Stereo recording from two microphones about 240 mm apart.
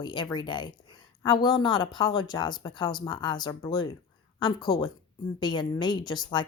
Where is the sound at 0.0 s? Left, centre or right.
Centre.